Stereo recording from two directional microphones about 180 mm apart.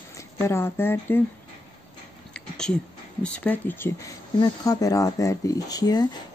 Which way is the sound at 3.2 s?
5° left (ahead or behind).